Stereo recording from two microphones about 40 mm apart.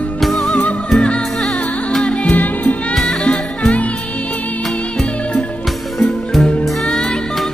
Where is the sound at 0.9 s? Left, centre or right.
Left.